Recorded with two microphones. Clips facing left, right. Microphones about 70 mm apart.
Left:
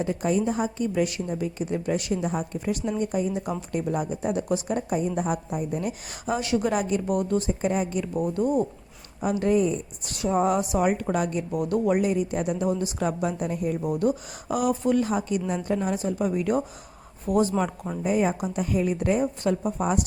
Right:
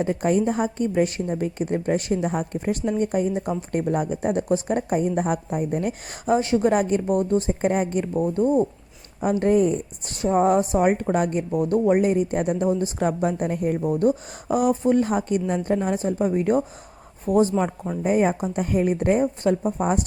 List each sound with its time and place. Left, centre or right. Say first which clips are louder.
0.0 s a woman's voice: right 3 dB; right
2.6 s a woman's voice: right 4 dB; right
13.9 s a woman's voice: right 4 dB; right